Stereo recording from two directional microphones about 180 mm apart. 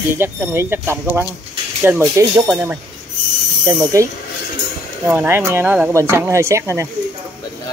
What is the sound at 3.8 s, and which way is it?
Speech, 15° right (ahead or behind).